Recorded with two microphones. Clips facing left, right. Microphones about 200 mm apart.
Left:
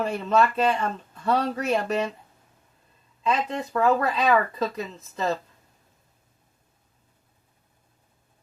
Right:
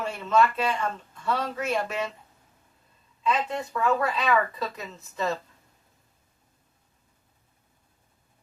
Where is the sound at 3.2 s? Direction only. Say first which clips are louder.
Left 1 dB; 35° left (ahead or behind).